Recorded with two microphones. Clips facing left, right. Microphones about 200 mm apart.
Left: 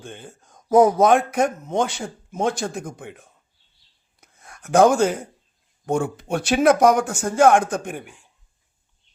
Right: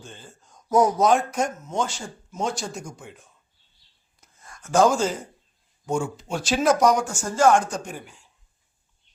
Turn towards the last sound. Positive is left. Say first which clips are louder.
# left 2 dB
turn(degrees=55)  # may be behind; listen again after turning